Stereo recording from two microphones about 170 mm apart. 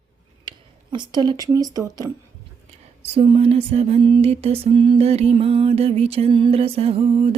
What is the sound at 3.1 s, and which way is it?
Music, 35° right (ahead or behind).